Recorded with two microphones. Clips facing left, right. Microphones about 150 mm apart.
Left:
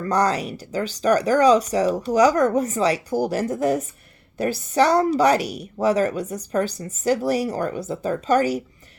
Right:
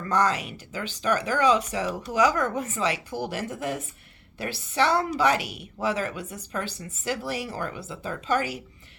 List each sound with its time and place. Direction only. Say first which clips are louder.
0.0 s a woman's voice: left 4 dB; 35° left (ahead or behind)